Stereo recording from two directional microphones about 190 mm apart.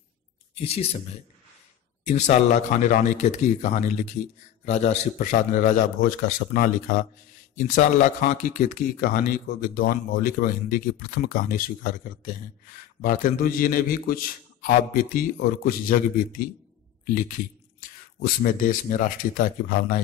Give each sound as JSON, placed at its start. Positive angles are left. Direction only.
{"t": 0.6, "sound": "speech", "side_deg": 30}
{"t": 2.0, "sound": "speech", "side_deg": 35}